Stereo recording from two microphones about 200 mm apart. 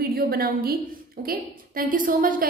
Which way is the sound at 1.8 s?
45° right (ahead or behind).